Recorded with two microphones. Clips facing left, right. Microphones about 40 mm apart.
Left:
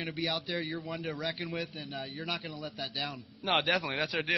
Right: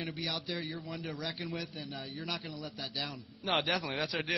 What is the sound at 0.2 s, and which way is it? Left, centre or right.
A man's voice, centre.